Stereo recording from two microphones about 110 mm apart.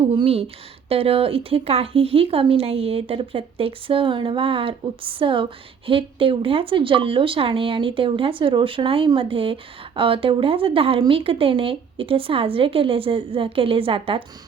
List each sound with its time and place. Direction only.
0.0 s a woman's voice: 60° right (ahead or behind)